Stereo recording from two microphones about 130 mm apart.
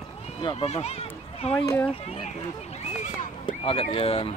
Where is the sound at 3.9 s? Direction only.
50° left (ahead or behind).